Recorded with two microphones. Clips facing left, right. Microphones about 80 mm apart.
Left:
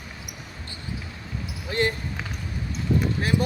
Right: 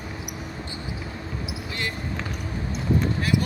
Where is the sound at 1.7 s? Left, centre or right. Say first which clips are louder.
Left 9 dB; left.